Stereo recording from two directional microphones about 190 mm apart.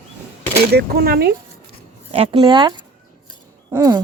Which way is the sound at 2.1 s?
30° right (ahead or behind).